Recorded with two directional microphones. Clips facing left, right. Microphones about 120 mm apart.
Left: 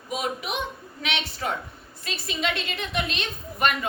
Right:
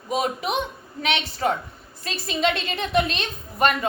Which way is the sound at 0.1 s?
35° right (ahead or behind).